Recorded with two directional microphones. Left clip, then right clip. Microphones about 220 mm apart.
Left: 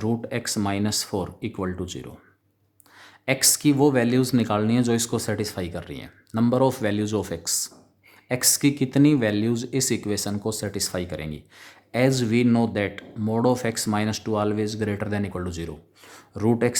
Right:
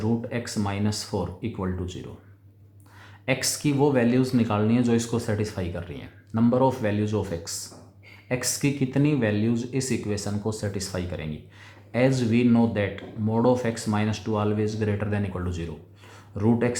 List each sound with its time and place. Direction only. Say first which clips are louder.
0.0 s speech: left 1 dB; 40° left (ahead or behind)
3.2 s speech: left 4 dB; 40° left (ahead or behind)